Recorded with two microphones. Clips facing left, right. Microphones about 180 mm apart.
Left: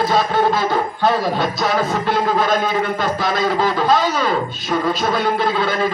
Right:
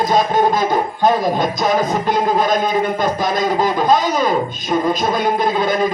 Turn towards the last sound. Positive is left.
turn(degrees=-15)  # may be behind; listen again after turning